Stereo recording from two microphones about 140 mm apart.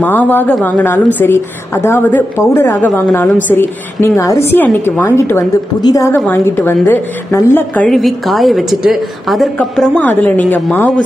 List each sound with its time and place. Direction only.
0.0 s a woman's voice: 15° left (ahead or behind)
7.9 s a woman's voice: centre (ahead or behind)